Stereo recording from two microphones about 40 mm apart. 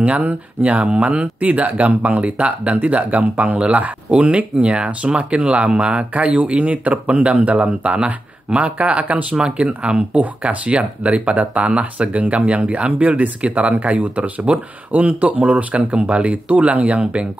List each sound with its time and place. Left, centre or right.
0.0 s speech: right